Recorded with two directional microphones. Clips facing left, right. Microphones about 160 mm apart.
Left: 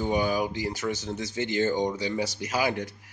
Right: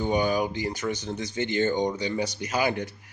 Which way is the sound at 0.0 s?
5° left (ahead or behind).